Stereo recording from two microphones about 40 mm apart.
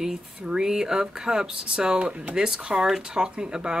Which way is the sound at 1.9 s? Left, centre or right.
Right.